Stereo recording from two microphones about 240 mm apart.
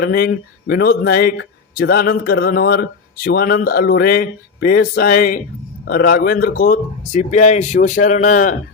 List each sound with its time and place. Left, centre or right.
0.0 s speech: left